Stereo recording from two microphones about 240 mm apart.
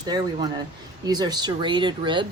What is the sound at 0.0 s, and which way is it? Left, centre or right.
Speech, centre.